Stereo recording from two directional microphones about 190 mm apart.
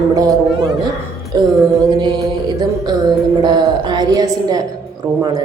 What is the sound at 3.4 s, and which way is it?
Speech, 20° right (ahead or behind).